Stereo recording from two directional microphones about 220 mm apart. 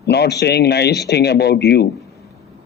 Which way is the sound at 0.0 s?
50° left (ahead or behind).